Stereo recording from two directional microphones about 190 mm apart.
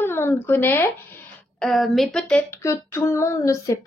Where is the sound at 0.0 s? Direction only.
10° left (ahead or behind).